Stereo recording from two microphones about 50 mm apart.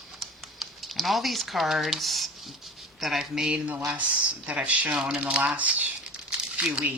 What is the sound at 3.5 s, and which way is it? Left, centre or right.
Speech, right.